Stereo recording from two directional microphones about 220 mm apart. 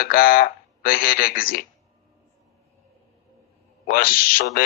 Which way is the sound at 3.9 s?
40° left (ahead or behind).